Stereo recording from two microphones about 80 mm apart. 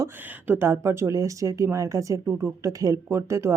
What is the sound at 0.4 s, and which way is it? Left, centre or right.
Speech, right.